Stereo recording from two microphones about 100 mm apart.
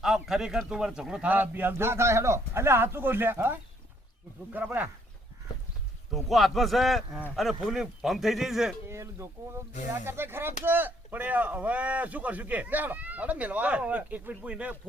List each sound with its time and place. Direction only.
0.0 s speech: 5° right (ahead or behind)
6.1 s speech: centre (ahead or behind)
8.9 s speech: 25° right (ahead or behind); by 14.8 s 10° right (ahead or behind)